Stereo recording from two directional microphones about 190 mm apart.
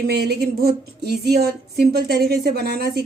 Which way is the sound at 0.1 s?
60° right (ahead or behind).